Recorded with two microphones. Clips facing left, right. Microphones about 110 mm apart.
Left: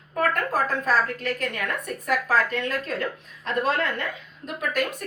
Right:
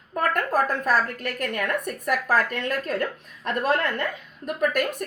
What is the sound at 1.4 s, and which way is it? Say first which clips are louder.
A woman's voice: right 3 dB; 55° right (ahead or behind).